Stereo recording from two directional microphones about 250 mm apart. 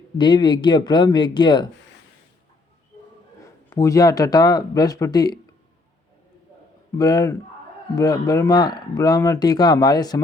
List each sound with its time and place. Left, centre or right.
0.2 s speech: centre
3.4 s speech: centre
6.9 s speech: centre